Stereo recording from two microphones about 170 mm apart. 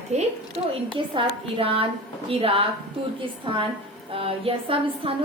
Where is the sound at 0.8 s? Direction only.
30° right (ahead or behind).